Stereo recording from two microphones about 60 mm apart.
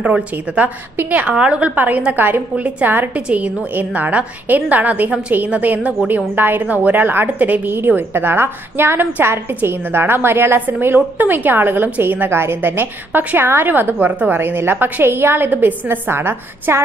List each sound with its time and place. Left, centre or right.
0.0 s a woman's voice: right
3.2 s a woman's voice: centre; by 16.8 s right